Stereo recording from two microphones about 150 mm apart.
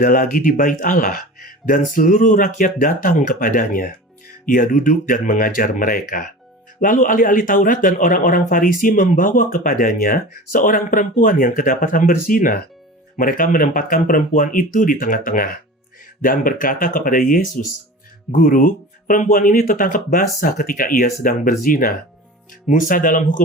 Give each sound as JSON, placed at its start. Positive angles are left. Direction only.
{"t": 0.0, "sound": "speech", "side_deg": 60}